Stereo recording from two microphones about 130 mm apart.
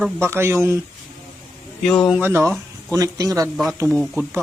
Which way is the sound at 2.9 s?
25° right (ahead or behind).